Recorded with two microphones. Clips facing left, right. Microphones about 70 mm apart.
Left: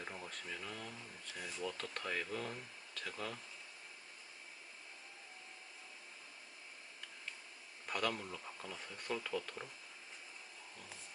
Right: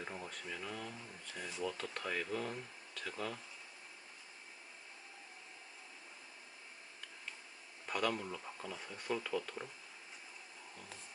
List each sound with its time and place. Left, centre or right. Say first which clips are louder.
0.0 s speech: right 2 dB; centre
7.9 s speech: right 2 dB; centre